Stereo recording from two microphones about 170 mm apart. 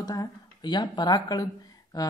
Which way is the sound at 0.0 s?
20° left (ahead or behind).